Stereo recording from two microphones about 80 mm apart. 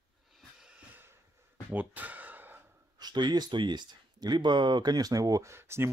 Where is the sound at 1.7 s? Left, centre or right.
Right.